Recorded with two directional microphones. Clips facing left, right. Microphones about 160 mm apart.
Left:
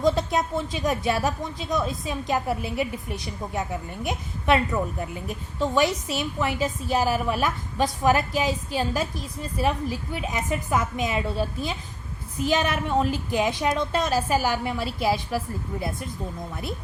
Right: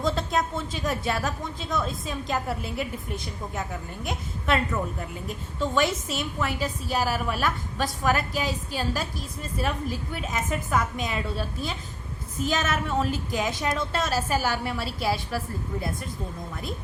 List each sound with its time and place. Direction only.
0.0 s a woman's voice: 15° left (ahead or behind)